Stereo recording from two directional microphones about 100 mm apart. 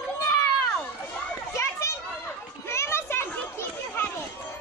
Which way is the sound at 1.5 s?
30° left (ahead or behind).